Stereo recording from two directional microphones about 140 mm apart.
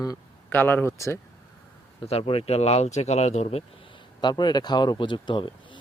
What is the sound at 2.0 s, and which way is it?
Speech, 45° left (ahead or behind).